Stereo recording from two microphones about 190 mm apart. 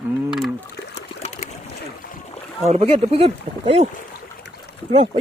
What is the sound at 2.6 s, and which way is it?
Speech, 35° right (ahead or behind).